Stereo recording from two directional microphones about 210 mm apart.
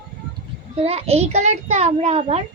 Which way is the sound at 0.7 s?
30° right (ahead or behind).